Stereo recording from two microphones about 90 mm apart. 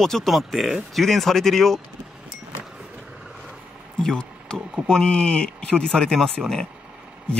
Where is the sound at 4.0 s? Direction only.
10° left (ahead or behind).